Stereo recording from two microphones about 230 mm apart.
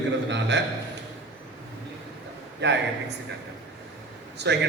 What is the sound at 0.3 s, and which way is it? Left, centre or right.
Speech, right.